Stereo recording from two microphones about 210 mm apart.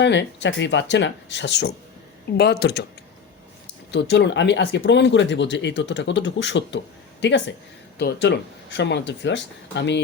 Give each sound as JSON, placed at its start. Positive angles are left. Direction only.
{"t": 0.0, "sound": "speech", "side_deg": 55}
{"t": 3.9, "sound": "speech", "side_deg": 55}